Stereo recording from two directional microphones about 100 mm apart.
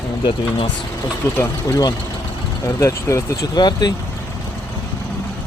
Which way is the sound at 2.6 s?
30° left (ahead or behind).